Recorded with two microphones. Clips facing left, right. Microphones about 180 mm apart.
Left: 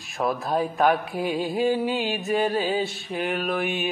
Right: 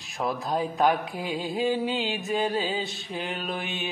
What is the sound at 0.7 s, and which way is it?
Mantra, 20° right (ahead or behind).